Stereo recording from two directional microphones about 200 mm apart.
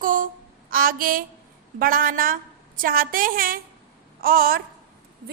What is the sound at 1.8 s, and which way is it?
A woman's voice, 45° right (ahead or behind).